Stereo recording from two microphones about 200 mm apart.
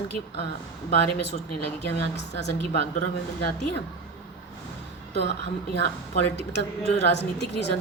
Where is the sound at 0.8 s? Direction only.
60° left (ahead or behind).